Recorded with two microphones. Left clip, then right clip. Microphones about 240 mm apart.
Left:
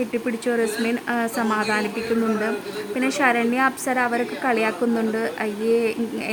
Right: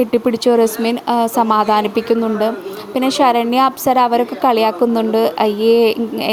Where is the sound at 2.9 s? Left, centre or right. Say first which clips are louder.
Right 7 dB; right.